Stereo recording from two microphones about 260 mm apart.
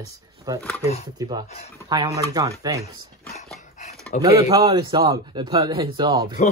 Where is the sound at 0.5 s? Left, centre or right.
Centre.